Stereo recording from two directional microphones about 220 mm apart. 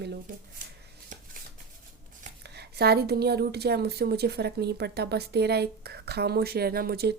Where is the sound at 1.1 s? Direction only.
35° right (ahead or behind).